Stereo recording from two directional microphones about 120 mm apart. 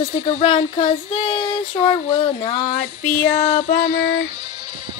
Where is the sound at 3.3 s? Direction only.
85° left.